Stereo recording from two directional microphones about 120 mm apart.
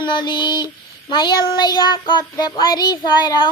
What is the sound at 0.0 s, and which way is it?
Child singing, 40° left (ahead or behind).